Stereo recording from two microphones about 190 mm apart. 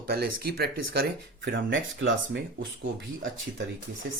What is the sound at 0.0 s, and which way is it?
Speech, 55° right (ahead or behind).